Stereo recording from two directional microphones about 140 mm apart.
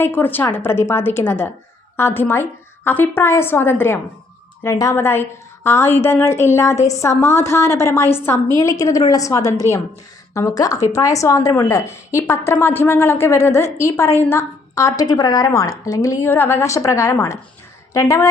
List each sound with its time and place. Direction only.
0.0 s a woman's voice: 15° left (ahead or behind)